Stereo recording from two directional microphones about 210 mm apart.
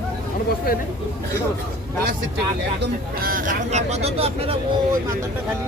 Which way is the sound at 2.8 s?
45° right (ahead or behind).